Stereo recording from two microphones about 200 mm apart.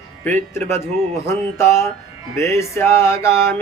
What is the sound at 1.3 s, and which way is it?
Speech, 15° left (ahead or behind).